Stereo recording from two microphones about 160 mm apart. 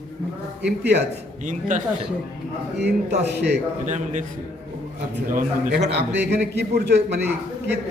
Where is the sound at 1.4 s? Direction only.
50° right (ahead or behind).